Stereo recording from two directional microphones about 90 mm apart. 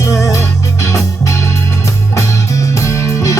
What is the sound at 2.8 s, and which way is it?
Music, 35° left (ahead or behind).